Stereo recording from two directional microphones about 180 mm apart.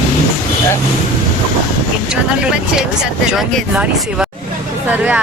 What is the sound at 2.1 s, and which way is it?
Speech, 5° right (ahead or behind).